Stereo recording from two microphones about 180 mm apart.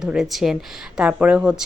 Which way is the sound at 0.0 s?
Centre (ahead or behind).